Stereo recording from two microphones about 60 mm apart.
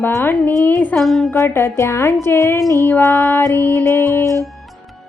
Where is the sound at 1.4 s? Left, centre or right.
Left.